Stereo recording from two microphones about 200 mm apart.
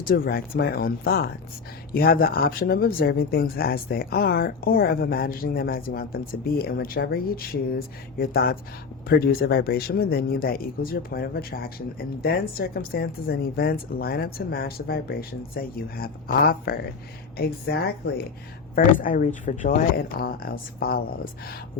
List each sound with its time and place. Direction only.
0.0 s speech: 50° left (ahead or behind)